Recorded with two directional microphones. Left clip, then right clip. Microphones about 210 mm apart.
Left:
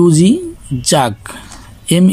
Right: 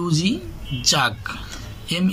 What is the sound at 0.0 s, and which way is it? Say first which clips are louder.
Speech: left 13 dB; 40° left (ahead or behind).